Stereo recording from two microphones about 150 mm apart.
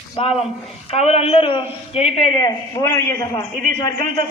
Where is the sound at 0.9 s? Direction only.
40° left (ahead or behind).